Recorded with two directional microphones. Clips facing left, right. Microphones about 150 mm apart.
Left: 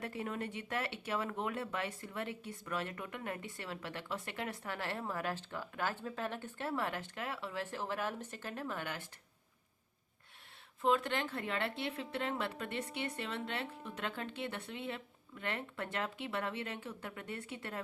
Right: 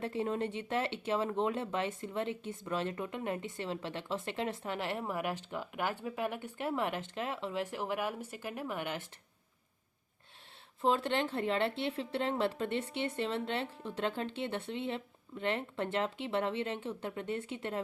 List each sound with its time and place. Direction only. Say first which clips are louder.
0.0 s speech: right 6 dB; 25° right (ahead or behind)
10.8 s speech: right 2 dB; 30° right (ahead or behind)